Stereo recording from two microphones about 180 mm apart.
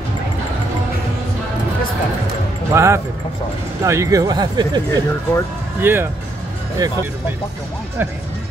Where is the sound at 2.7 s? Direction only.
15° right (ahead or behind).